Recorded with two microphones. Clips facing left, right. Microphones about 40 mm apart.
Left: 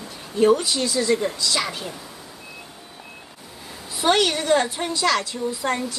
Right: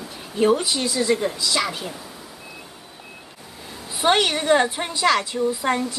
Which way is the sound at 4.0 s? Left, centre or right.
Right.